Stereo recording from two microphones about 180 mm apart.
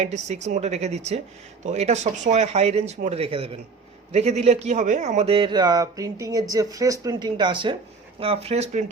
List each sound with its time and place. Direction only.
0.0 s speech: 40° right (ahead or behind)